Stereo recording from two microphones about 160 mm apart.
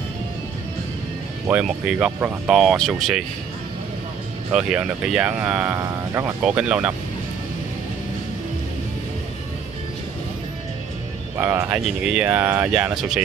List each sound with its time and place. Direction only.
1.5 s speech: 5° right (ahead or behind)
4.5 s speech: 5° right (ahead or behind)
6.4 s speech: 5° right (ahead or behind)
11.3 s speech: 15° right (ahead or behind)